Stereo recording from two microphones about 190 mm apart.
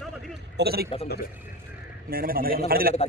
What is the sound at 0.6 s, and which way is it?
Speech, 55° right (ahead or behind).